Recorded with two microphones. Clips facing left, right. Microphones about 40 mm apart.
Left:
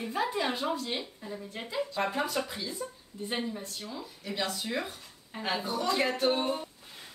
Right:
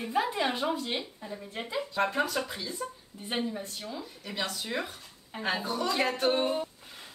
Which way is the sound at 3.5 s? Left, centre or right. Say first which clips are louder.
Right 1 dB; centre.